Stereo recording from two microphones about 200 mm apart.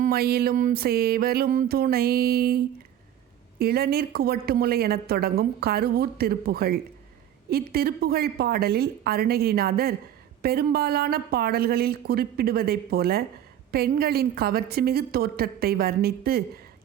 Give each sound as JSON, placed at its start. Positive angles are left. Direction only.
{"t": 0.0, "sound": "a woman's voice", "side_deg": -50}
{"t": 3.6, "sound": "a woman's voice", "side_deg": -50}